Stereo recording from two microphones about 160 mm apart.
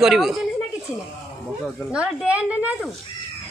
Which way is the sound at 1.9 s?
5° right (ahead or behind).